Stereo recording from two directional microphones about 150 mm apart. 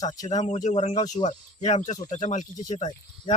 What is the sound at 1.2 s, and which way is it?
Speech, 50° left (ahead or behind).